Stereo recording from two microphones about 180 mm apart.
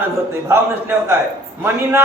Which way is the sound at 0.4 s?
15° right (ahead or behind).